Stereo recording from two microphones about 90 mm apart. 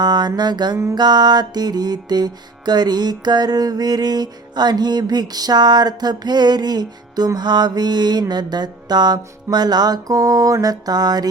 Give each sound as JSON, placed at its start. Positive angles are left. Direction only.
{"t": 0.0, "sound": "music", "side_deg": -55}